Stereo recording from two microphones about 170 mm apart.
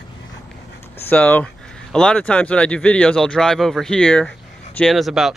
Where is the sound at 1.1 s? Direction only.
10° left (ahead or behind).